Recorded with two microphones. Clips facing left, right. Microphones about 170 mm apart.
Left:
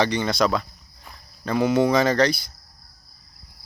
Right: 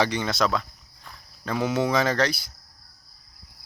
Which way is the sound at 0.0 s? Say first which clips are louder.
Left 3 dB; 5° right (ahead or behind).